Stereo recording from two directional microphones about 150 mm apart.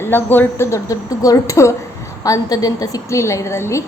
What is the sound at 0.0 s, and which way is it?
A woman's voice, 15° left (ahead or behind).